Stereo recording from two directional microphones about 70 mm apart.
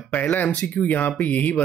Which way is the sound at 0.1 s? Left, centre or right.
Left.